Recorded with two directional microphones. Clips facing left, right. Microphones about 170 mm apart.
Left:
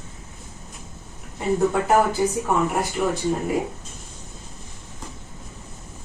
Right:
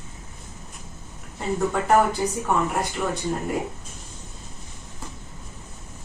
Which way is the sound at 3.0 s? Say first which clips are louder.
Left 5 dB; 10° left (ahead or behind).